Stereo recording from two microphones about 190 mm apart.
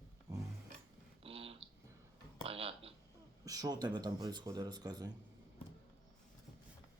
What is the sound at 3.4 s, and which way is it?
Speech, 20° right (ahead or behind).